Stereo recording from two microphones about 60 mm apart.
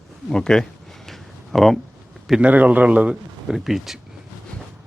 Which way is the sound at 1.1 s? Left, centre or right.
Centre.